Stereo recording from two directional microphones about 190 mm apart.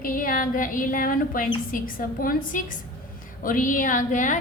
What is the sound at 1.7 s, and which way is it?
A woman's voice, 45° left (ahead or behind).